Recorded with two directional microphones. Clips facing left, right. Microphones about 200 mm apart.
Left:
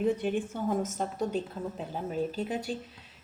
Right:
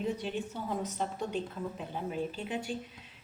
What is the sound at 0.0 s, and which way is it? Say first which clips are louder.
A woman's voice: left 6 dB; 50° left (ahead or behind).